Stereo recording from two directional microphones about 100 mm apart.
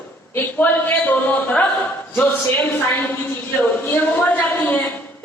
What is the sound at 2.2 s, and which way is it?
A woman's voice, 20° left (ahead or behind).